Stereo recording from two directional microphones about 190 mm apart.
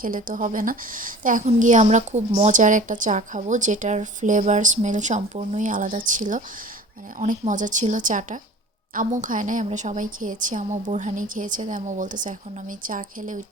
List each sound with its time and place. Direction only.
0.0 s a woman's voice: 45° right (ahead or behind)